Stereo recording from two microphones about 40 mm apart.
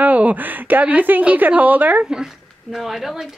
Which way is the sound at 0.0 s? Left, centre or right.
Right.